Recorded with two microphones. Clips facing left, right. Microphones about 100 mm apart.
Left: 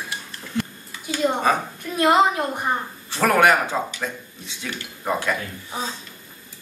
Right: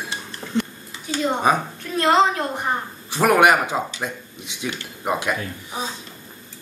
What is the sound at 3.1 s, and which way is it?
Speech, 15° right (ahead or behind).